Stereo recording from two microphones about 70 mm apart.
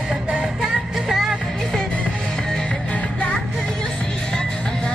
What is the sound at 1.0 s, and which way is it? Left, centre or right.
Music, centre.